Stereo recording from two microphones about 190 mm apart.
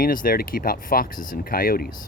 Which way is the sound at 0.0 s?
50° left (ahead or behind).